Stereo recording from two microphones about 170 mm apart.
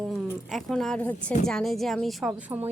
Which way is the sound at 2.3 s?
10° right (ahead or behind).